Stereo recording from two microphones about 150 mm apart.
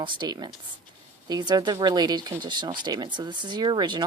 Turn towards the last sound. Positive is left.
turn(degrees=-30)  # may be behind; listen again after turning